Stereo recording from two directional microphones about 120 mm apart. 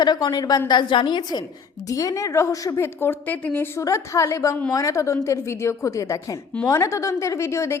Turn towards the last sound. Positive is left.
turn(degrees=25)  # may be behind; listen again after turning